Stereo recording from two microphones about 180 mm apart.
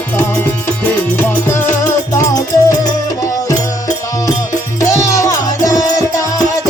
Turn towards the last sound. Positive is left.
turn(degrees=20)  # may be behind; listen again after turning